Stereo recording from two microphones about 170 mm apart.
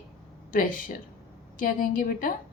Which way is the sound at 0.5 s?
55° left (ahead or behind).